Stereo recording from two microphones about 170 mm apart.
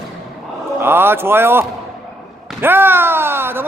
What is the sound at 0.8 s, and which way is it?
Speech, 15° right (ahead or behind).